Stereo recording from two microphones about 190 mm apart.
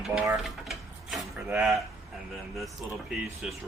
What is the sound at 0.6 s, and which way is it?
Mechanisms, centre (ahead or behind).